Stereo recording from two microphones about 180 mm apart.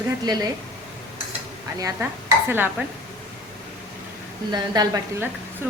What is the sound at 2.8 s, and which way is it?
Speech, 10° right (ahead or behind).